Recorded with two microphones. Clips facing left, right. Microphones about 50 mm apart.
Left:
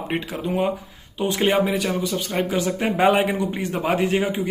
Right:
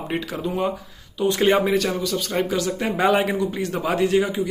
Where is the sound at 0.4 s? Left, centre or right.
Left.